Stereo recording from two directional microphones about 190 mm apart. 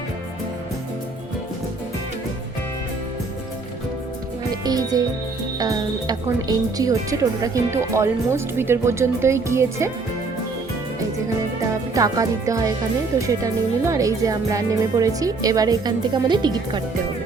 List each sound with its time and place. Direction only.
4.6 s speech: 20° right (ahead or behind)
11.9 s speech: 20° right (ahead or behind)